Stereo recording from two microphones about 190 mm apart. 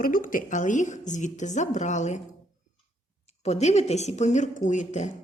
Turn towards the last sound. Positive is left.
turn(degrees=40)  # may be behind; listen again after turning